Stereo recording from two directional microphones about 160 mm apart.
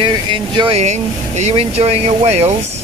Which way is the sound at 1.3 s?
45° right (ahead or behind).